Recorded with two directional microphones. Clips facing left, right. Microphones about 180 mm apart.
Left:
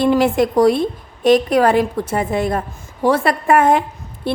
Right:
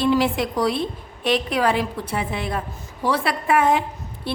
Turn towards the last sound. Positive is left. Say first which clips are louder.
# left 6 dB
turn(degrees=50)  # may be behind; listen again after turning